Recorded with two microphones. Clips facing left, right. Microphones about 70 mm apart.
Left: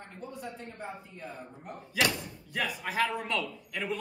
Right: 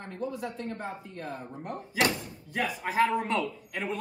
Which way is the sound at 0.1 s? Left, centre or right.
Right.